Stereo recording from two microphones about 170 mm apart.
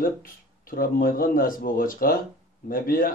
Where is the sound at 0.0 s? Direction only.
55° left (ahead or behind).